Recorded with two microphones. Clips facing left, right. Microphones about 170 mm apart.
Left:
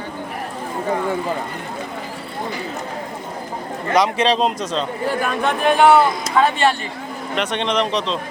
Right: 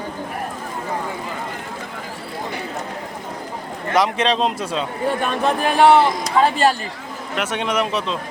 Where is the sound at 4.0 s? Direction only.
Centre (ahead or behind).